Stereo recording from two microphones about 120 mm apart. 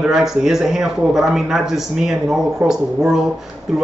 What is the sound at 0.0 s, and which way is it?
A man's voice, 5° right (ahead or behind).